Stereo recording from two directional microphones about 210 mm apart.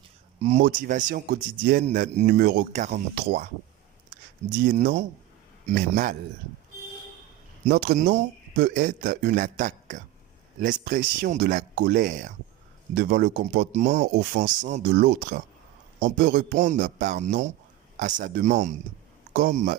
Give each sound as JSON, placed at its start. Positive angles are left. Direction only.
{"t": 0.3, "sound": "speech", "side_deg": -30}
{"t": 1.8, "sound": "speech", "side_deg": -35}
{"t": 4.7, "sound": "speech", "side_deg": -40}
{"t": 7.7, "sound": "speech", "side_deg": -50}
{"t": 7.9, "sound": "speech", "side_deg": -35}
{"t": 12.9, "sound": "speech", "side_deg": -50}